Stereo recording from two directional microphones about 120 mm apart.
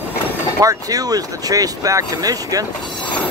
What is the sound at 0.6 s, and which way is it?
Speech, 30° right (ahead or behind).